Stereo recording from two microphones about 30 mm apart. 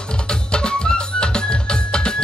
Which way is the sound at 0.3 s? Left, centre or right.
Left.